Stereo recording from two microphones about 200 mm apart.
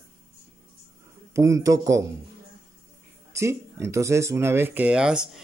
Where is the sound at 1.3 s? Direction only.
15° right (ahead or behind).